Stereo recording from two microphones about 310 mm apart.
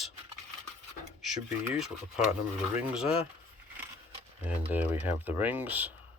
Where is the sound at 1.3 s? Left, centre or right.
Centre.